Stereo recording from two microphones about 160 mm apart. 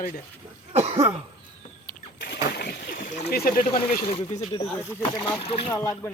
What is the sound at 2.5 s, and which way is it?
Splash, 70° left (ahead or behind).